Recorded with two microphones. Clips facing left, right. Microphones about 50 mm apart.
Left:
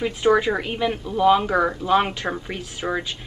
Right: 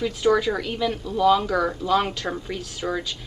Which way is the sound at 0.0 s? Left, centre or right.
Left.